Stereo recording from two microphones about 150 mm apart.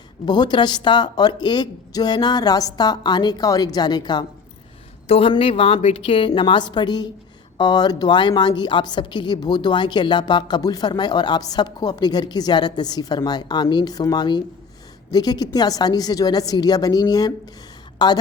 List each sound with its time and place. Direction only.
0.3 s a woman's voice: 30° left (ahead or behind)
5.0 s a woman's voice: 40° left (ahead or behind)